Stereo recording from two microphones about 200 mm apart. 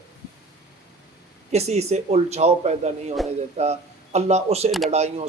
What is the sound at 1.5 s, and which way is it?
Speech, 30° right (ahead or behind).